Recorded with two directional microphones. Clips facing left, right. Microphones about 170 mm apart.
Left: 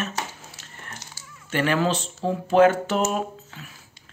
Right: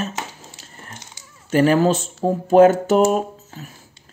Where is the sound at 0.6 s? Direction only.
25° right (ahead or behind).